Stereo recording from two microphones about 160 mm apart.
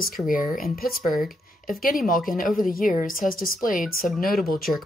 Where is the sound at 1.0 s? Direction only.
Centre (ahead or behind).